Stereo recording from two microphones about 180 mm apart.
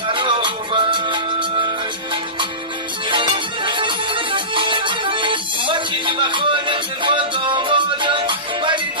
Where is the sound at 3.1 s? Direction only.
25° right (ahead or behind).